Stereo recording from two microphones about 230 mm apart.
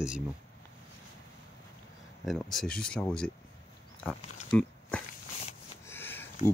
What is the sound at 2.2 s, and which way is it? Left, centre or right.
Speech, centre.